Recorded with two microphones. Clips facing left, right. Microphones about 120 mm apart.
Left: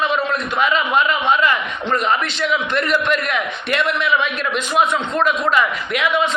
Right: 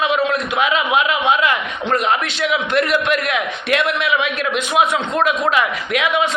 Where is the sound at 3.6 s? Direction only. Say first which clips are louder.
Right 2 dB; 75° right (ahead or behind).